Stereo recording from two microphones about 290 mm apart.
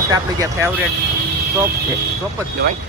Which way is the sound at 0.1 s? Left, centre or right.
Centre.